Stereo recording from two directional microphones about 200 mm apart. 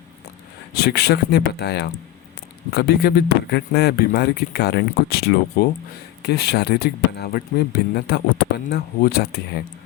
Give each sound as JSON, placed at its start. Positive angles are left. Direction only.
{"t": 0.7, "sound": "speech", "side_deg": 55}